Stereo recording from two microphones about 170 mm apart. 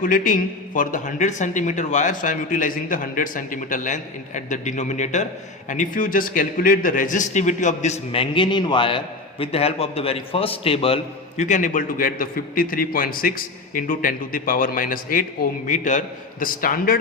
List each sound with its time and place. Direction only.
0.0 s a man's voice: 50° left (ahead or behind)